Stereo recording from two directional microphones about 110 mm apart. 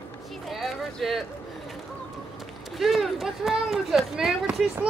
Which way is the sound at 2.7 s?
Centre (ahead or behind).